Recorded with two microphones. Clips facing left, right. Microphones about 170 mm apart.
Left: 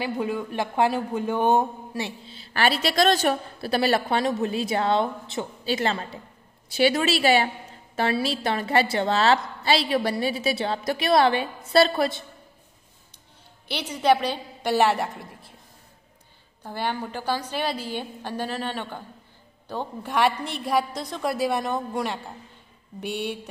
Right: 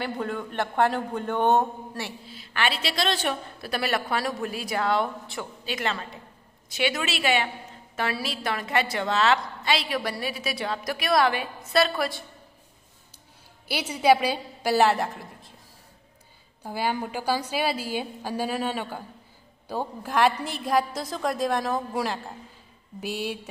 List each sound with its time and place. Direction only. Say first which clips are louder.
0.0 s a man's voice: left 3 dB; 10° left (ahead or behind)
2.0 s a woman's voice: left 2 dB; 25° left (ahead or behind); by 3.3 s 45° left (ahead or behind)
3.6 s a woman's voice: left 5 dB; 30° left (ahead or behind)
13.7 s a woman's voice: right 1 dB; 10° right (ahead or behind)
16.6 s a woman's voice: right 1 dB; 10° right (ahead or behind)